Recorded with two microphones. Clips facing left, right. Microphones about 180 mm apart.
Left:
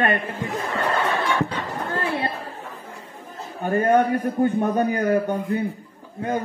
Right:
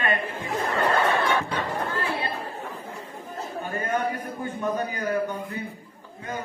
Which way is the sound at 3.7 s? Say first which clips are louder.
Left 10 dB; 55° left (ahead or behind).